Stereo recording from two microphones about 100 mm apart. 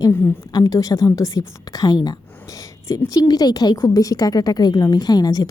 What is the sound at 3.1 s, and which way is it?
A woman's voice, 40° left (ahead or behind).